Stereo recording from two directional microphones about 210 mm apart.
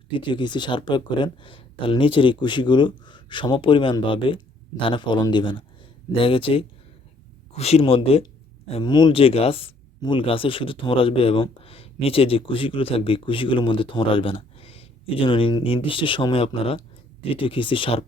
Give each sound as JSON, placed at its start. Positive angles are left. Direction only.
{"t": 0.1, "sound": "speech", "side_deg": 20}